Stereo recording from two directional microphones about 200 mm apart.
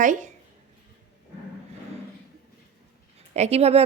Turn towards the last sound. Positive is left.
turn(degrees=-30)  # may be behind; listen again after turning